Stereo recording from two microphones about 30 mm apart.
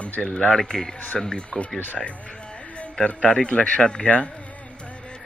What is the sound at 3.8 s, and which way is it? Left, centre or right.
Speech, left.